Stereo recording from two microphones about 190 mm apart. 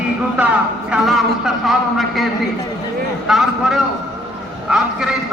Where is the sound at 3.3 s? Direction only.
Centre (ahead or behind).